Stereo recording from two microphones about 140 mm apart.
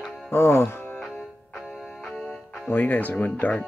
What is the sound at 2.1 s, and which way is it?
Music, 10° left (ahead or behind).